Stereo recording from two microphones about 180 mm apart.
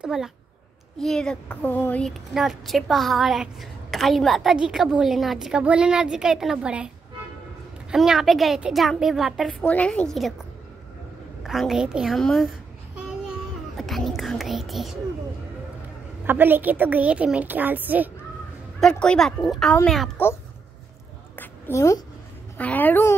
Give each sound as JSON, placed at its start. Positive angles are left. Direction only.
{"t": 0.0, "sound": "a woman's voice", "side_deg": -5}
{"t": 7.9, "sound": "a woman's voice", "side_deg": 0}
{"t": 11.4, "sound": "a child's voice", "side_deg": 0}
{"t": 16.3, "sound": "a woman's voice", "side_deg": -10}
{"t": 18.8, "sound": "a woman's voice", "side_deg": 5}
{"t": 21.4, "sound": "a sound", "side_deg": 15}
{"t": 22.6, "sound": "a woman's voice", "side_deg": 10}